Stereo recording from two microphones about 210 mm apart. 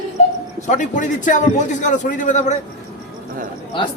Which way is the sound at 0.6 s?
35° left (ahead or behind).